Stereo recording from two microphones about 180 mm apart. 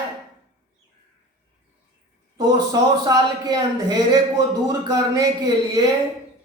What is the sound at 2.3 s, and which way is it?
Speech, 20° right (ahead or behind).